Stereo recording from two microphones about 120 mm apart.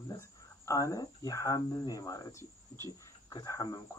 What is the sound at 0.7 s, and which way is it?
Speech, 30° left (ahead or behind).